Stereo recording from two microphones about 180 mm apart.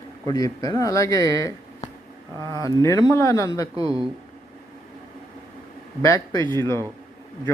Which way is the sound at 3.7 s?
30° right (ahead or behind).